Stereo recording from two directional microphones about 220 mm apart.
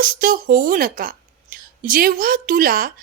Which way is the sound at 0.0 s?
40° right (ahead or behind).